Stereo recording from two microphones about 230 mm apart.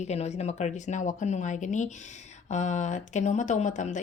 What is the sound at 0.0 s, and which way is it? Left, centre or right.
Speech, left.